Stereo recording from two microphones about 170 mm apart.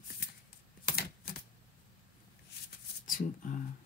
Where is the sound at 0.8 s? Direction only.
65° left (ahead or behind).